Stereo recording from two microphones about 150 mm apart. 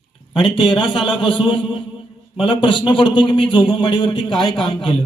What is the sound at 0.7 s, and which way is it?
A man's voice, 35° left (ahead or behind).